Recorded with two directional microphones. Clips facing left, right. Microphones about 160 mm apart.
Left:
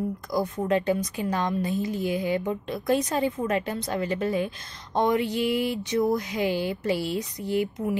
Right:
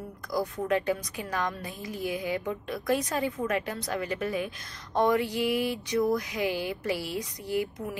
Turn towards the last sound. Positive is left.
turn(degrees=25)  # may be behind; listen again after turning